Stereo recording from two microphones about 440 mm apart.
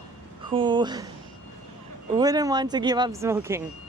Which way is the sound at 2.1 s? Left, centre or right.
Centre.